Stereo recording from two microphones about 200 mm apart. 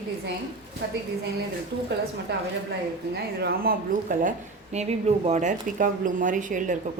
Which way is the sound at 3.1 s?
55° right (ahead or behind).